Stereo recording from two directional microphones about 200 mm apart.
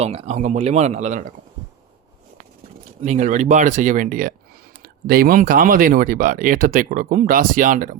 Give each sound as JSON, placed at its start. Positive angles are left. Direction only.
{"t": 0.0, "sound": "speech", "side_deg": -30}
{"t": 3.0, "sound": "speech", "side_deg": -35}